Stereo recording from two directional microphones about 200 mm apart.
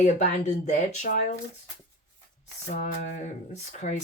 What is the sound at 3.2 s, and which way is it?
Speech, 35° left (ahead or behind).